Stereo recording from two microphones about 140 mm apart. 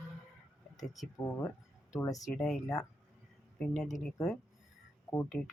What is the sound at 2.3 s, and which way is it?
Speech, 5° left (ahead or behind).